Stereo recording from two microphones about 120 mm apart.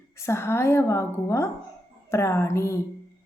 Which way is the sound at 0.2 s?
20° left (ahead or behind).